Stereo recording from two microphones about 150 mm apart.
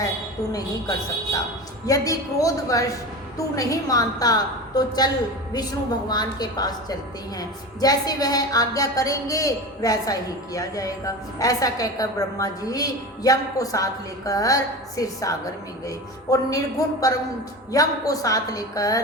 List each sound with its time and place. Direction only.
0.5 s a woman's voice: 25° left (ahead or behind)